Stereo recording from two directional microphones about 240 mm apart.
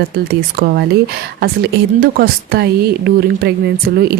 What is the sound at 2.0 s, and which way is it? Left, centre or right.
Speech, right.